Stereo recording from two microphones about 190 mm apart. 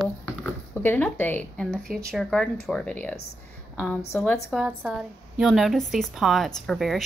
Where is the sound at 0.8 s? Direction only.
10° left (ahead or behind).